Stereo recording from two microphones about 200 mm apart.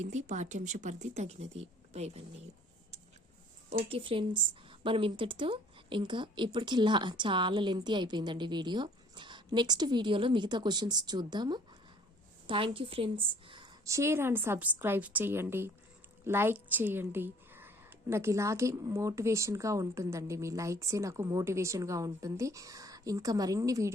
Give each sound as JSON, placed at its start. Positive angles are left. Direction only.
{"t": 0.0, "sound": "speech", "side_deg": -35}
{"t": 3.7, "sound": "a woman's voice", "side_deg": -30}